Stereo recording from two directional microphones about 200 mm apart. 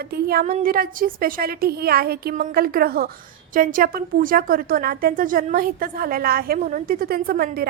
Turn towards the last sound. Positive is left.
turn(degrees=-50)  # may be behind; listen again after turning